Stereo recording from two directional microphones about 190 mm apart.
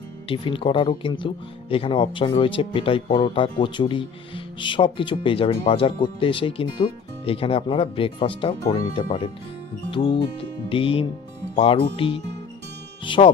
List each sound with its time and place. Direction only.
0.3 s speech: 25° left (ahead or behind)